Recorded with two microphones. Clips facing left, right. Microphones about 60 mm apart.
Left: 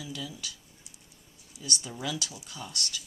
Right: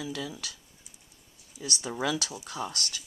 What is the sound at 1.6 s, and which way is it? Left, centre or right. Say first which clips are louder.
Speech: right 4 dB; right.